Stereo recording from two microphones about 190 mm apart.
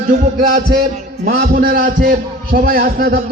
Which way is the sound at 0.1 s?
40° right (ahead or behind).